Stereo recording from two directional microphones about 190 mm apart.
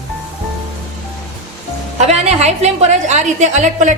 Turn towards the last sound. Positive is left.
turn(degrees=-40)  # may be behind; listen again after turning